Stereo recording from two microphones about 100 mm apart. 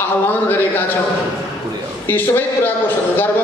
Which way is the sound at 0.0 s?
20° left (ahead or behind).